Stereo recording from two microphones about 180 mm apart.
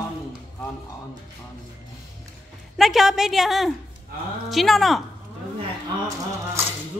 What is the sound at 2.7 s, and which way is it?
A woman's voice, centre (ahead or behind).